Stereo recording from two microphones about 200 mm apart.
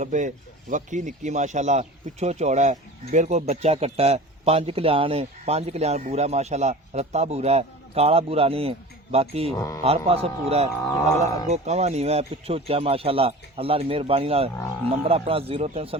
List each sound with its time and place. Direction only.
0.0 s speech: 40° right (ahead or behind)
9.6 s speech: 15° left (ahead or behind)
9.8 s speech: 30° right (ahead or behind)